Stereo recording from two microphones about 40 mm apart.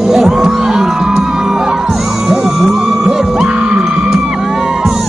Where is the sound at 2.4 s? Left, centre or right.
Centre.